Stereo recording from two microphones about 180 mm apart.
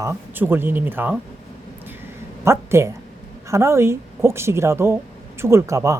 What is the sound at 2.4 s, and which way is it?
A woman's voice, 15° right (ahead or behind).